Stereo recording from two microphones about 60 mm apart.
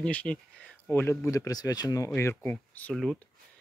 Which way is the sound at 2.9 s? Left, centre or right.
Centre.